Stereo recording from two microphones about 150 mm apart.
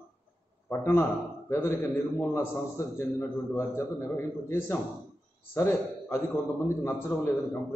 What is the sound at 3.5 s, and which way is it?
A man's voice, 20° left (ahead or behind).